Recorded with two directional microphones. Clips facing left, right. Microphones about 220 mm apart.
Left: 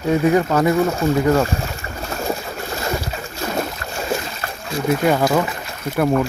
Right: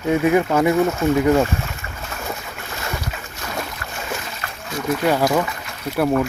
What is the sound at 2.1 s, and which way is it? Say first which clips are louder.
Boat: left 7 dB; 35° left (ahead or behind).